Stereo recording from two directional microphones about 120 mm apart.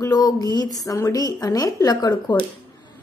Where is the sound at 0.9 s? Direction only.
30° left (ahead or behind).